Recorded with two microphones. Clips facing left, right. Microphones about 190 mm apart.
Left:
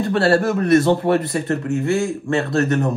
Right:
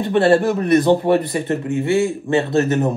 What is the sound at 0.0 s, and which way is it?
Speech, 20° right (ahead or behind).